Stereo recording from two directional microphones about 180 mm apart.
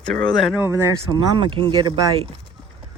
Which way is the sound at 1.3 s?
30° right (ahead or behind).